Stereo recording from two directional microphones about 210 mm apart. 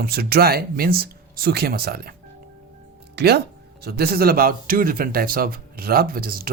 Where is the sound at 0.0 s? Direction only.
45° right (ahead or behind).